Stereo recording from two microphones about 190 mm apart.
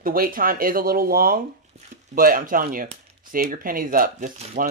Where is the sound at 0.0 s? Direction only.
50° right (ahead or behind).